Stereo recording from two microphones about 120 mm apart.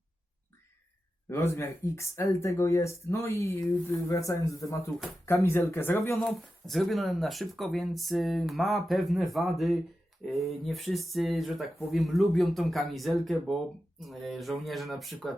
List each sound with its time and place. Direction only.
1.3 s speech: 25° left (ahead or behind)
6.1 s speech: centre (ahead or behind)